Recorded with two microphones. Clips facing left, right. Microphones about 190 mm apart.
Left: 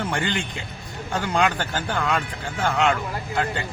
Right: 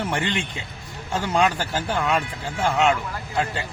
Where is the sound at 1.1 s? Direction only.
10° right (ahead or behind).